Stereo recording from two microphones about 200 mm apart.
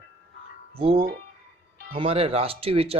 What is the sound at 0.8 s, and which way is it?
Speech, 30° right (ahead or behind).